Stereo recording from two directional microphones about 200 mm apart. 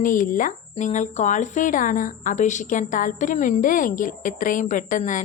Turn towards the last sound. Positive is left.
turn(degrees=40)  # may be behind; listen again after turning